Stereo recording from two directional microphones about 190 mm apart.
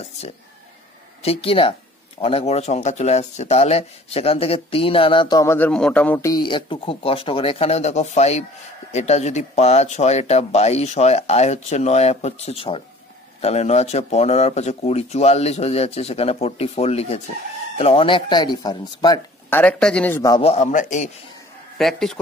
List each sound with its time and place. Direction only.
1.2 s speech: 30° left (ahead or behind)
19.6 s speech: 5° left (ahead or behind)
20.4 s speech: 35° left (ahead or behind)
21.7 s speech: centre (ahead or behind)